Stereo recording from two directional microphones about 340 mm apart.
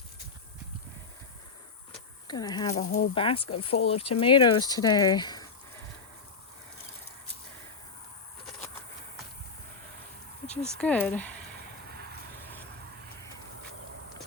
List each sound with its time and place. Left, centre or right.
2.2 s speech: centre
10.6 s speech: centre